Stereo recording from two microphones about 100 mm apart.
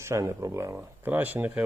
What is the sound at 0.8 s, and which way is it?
Speech, 20° right (ahead or behind).